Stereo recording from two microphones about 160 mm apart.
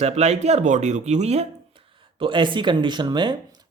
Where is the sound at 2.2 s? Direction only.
30° right (ahead or behind).